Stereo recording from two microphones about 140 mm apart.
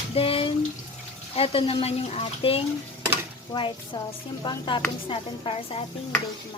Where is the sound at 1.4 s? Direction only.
45° left (ahead or behind).